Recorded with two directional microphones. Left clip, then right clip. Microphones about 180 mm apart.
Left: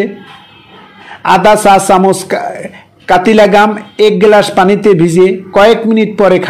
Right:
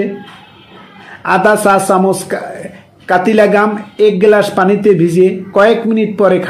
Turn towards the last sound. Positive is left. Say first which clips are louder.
# left 3 dB
turn(degrees=40)  # may be behind; listen again after turning